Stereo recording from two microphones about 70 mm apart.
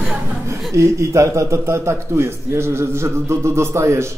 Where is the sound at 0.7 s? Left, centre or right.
Right.